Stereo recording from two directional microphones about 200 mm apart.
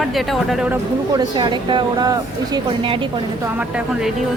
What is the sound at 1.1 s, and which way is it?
Speech, 20° right (ahead or behind).